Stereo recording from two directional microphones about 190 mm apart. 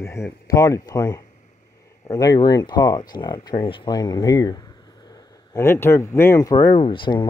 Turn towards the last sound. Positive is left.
turn(degrees=25)  # may be behind; listen again after turning